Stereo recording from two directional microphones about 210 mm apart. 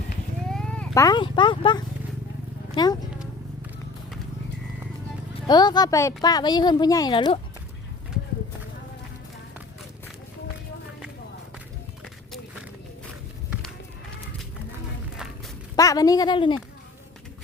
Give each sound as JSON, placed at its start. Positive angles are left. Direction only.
{"t": 0.5, "sound": "a sound", "side_deg": 5}
{"t": 1.0, "sound": "a woman's voice", "side_deg": 20}
{"t": 5.5, "sound": "a woman's voice", "side_deg": 20}
{"t": 15.7, "sound": "speech", "side_deg": 15}